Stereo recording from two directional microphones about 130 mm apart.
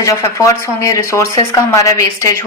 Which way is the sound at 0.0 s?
25° left (ahead or behind).